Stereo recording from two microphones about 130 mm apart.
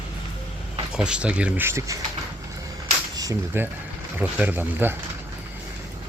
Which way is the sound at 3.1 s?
25° right (ahead or behind).